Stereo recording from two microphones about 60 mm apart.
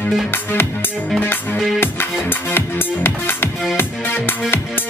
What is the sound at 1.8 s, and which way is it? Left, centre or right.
Music, left.